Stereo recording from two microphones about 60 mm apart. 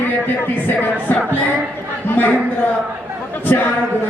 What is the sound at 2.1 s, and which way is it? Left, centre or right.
Speech, left.